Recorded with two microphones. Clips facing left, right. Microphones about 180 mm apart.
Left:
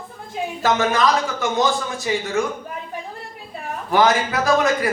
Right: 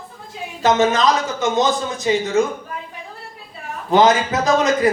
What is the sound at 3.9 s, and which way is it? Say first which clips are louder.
Speech: right 3 dB; 20° right (ahead or behind).